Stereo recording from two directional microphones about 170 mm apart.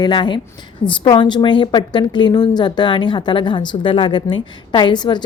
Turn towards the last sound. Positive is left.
turn(degrees=25)  # may be behind; listen again after turning